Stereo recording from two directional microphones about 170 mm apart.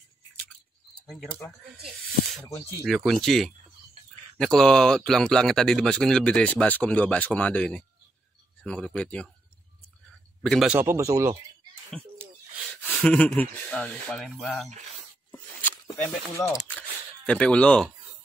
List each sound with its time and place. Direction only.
1.0 s speech: centre (ahead or behind)
2.8 s speech: centre (ahead or behind)
10.4 s speech: centre (ahead or behind)
10.8 s speech: 15° right (ahead or behind)
13.0 s speech: 5° left (ahead or behind)
15.6 s a sound: 10° left (ahead or behind)
17.3 s speech: 5° left (ahead or behind)